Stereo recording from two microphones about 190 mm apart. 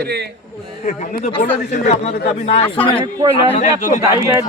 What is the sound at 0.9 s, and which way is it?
A man's voice, 35° left (ahead or behind).